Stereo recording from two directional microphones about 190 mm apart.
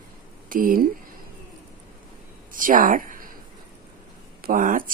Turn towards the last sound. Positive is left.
turn(degrees=-45)  # may be behind; listen again after turning